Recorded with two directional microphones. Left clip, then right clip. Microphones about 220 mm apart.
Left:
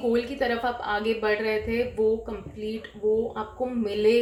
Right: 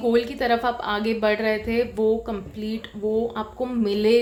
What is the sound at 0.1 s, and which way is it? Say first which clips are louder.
A woman's voice: right 6 dB; 40° right (ahead or behind).